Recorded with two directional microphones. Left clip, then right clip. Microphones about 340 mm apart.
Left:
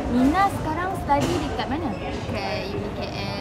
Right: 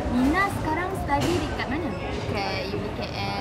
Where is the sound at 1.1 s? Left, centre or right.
Centre.